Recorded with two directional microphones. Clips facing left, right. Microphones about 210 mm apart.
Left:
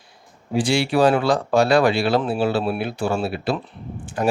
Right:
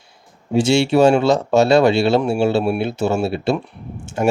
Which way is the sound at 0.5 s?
25° right (ahead or behind).